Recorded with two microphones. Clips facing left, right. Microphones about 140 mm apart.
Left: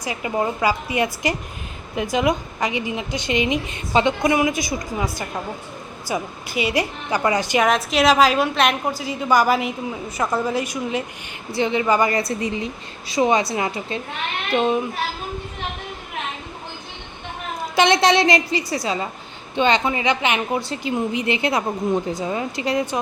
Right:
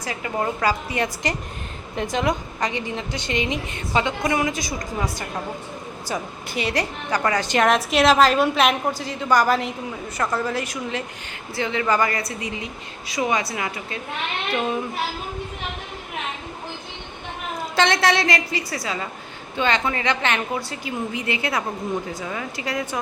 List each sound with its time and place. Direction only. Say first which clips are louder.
0.0 s a woman's voice: left 2 dB; 15° left (ahead or behind)
6.1 s a woman's voice: left 3 dB; 5° left (ahead or behind); by 14.8 s 25° left (ahead or behind)
17.7 s a woman's voice: left 4 dB; 15° left (ahead or behind)